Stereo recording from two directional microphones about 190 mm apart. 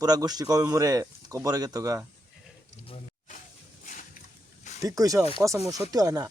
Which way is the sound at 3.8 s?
40° left (ahead or behind).